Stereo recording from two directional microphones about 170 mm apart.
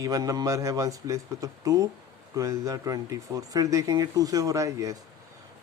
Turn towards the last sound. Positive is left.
turn(degrees=-20)  # may be behind; listen again after turning